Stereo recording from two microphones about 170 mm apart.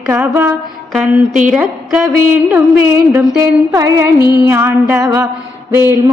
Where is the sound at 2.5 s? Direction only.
10° right (ahead or behind).